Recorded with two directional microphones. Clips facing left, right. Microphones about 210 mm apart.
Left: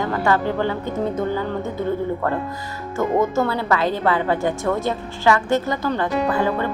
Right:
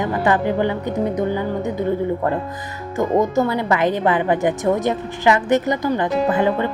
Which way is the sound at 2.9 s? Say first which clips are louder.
Right 2 dB; 15° right (ahead or behind).